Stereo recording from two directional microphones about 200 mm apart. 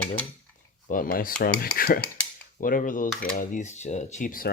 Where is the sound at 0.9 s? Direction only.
45° left (ahead or behind).